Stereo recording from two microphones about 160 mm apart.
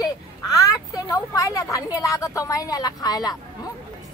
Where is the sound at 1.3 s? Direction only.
20° left (ahead or behind).